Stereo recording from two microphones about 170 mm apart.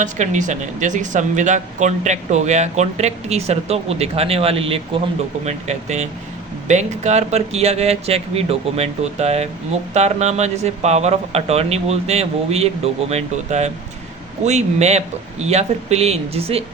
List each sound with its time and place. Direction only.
0.0 s speech: 45° right (ahead or behind)